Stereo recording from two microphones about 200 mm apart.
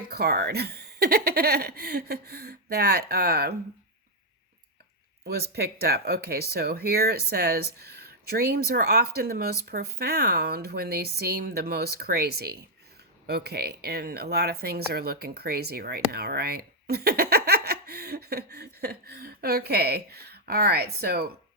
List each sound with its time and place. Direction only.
0.1 s speech: 50° right (ahead or behind)
5.2 s speech: 50° right (ahead or behind)